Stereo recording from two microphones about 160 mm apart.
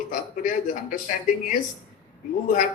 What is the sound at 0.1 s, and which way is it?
A man's voice, 55° left (ahead or behind).